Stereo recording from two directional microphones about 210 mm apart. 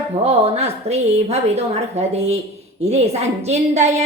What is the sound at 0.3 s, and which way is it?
A woman's voice, 30° right (ahead or behind).